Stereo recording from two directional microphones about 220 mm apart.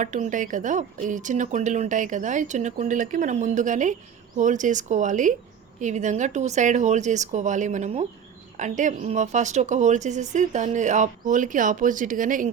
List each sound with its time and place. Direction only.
0.0 s speech: 35° right (ahead or behind)